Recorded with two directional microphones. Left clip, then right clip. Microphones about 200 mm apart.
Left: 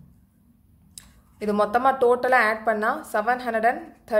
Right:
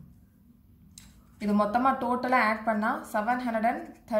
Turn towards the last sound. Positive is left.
turn(degrees=55)  # may be behind; listen again after turning